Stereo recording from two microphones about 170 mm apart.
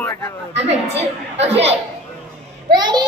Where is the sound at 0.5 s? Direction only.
40° right (ahead or behind).